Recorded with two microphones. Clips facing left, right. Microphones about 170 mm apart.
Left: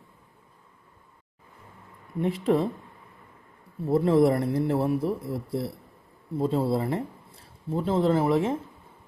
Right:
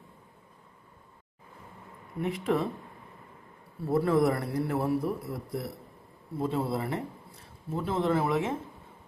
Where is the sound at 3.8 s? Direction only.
25° left (ahead or behind).